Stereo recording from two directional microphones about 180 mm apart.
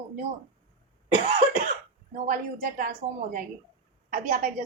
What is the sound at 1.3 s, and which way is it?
A woman's voice, 50° right (ahead or behind).